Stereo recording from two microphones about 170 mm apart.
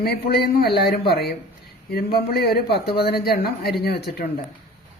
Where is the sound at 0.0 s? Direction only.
70° left (ahead or behind).